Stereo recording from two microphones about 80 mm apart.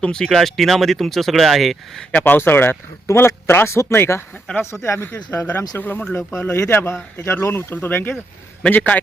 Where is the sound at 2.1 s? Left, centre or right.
Left.